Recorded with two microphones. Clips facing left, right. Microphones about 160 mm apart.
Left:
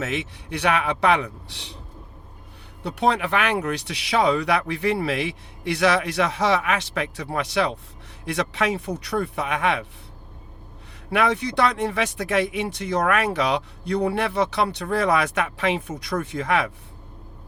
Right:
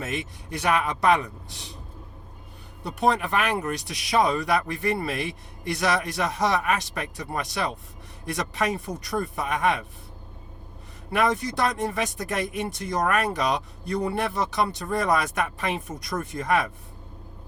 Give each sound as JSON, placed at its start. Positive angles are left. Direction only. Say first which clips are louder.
{"t": 0.0, "sound": "speech", "louder": "left 4 dB", "side_deg": 65}
{"t": 2.8, "sound": "speech", "louder": "left 2 dB", "side_deg": 65}
{"t": 11.1, "sound": "speech", "louder": "left 2 dB", "side_deg": 65}